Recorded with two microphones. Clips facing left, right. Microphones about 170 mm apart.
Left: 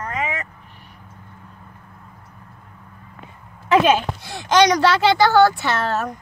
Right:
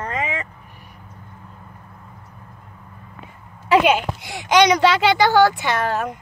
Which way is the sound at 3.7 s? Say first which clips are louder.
Even; 10° right (ahead or behind).